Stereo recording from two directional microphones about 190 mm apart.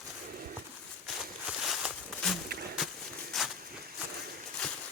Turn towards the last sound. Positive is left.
turn(degrees=0)  # may be behind; listen again after turning